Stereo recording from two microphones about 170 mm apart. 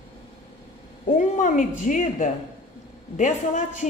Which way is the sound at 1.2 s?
50° left (ahead or behind).